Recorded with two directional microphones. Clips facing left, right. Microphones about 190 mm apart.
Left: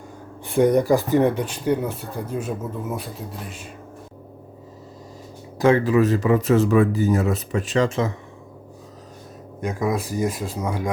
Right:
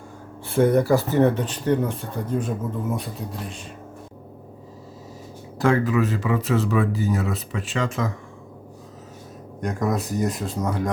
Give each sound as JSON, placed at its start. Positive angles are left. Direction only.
{"t": 0.4, "sound": "speech", "side_deg": 15}
{"t": 5.5, "sound": "speech", "side_deg": 20}
{"t": 5.8, "sound": "speech", "side_deg": 35}
{"t": 9.6, "sound": "speech", "side_deg": 10}